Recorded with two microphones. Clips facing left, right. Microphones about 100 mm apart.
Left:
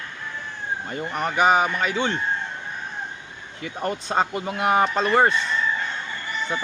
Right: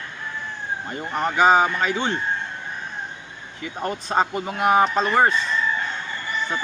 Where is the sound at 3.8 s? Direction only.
20° right (ahead or behind).